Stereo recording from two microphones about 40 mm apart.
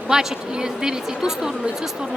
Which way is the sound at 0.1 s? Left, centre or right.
Centre.